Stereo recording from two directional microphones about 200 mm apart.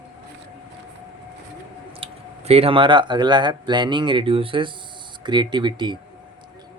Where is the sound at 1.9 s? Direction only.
30° right (ahead or behind).